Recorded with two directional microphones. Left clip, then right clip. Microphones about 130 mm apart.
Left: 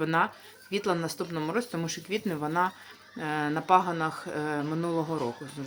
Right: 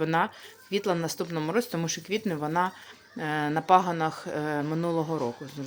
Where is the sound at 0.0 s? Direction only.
25° right (ahead or behind).